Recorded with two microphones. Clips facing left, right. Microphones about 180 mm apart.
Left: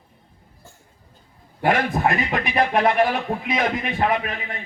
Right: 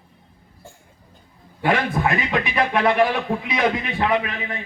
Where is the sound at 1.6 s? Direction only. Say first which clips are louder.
Left 1 dB; 45° left (ahead or behind).